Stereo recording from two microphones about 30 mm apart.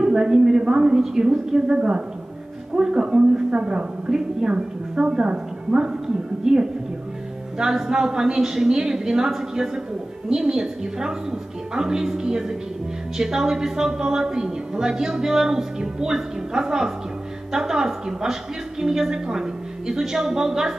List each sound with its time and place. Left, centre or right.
0.0 s a sound: right
0.7 s a woman's voice: right
6.4 s a woman's voice: right
7.7 s a woman's voice: centre